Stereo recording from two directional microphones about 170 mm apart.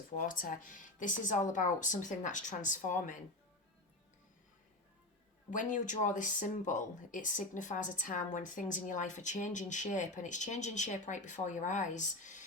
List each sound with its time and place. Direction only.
0.2 s speech: 50° left (ahead or behind)
5.5 s speech: 50° left (ahead or behind)